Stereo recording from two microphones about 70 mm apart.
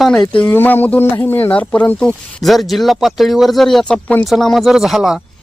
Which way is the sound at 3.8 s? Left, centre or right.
Centre.